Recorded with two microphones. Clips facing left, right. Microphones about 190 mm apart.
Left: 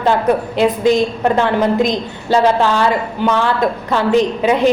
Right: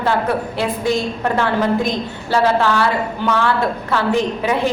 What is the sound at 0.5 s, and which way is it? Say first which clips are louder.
A woman's voice: left 6 dB; 20° left (ahead or behind).